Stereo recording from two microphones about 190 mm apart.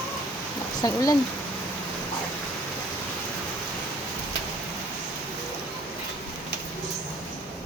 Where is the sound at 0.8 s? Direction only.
20° left (ahead or behind).